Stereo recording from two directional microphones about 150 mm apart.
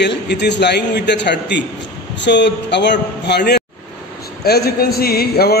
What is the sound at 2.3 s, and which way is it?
Speech, 90° left.